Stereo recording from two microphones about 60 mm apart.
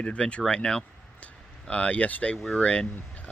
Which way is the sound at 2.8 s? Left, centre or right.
Left.